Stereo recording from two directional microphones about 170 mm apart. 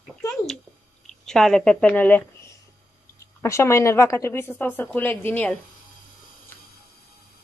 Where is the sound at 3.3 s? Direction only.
15° left (ahead or behind).